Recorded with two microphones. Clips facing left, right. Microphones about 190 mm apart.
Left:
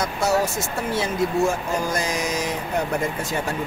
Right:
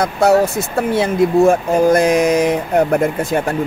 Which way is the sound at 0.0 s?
60° right (ahead or behind).